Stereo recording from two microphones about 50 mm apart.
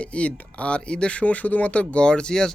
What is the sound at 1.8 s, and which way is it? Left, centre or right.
Speech, centre.